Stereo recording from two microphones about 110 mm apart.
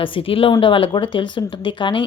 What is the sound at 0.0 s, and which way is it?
A woman's voice, 55° left (ahead or behind).